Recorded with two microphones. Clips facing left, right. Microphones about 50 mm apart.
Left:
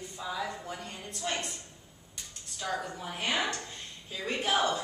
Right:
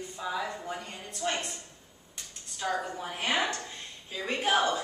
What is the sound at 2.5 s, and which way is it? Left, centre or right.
A woman's voice, centre.